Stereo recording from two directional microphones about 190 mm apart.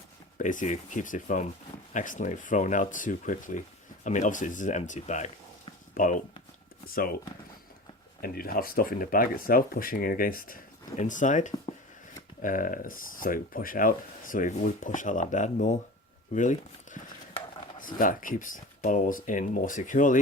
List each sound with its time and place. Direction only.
0.3 s speech: 40° left (ahead or behind)
8.2 s speech: 50° left (ahead or behind)